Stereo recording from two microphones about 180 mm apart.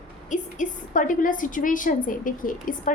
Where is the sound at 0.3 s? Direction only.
45° left (ahead or behind).